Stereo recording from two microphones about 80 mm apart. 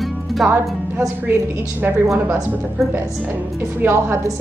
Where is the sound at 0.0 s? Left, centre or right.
Centre.